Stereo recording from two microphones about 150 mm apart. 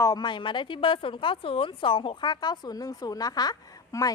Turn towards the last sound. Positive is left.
turn(degrees=25)  # may be behind; listen again after turning